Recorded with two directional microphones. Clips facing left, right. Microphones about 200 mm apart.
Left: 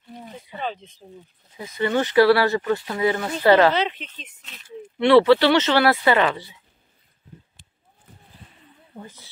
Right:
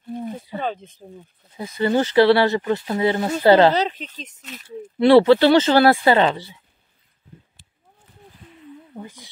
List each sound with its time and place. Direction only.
0.1 s snake: 50° right (ahead or behind)
1.6 s speech: 30° right (ahead or behind)
9.0 s speech: 15° right (ahead or behind)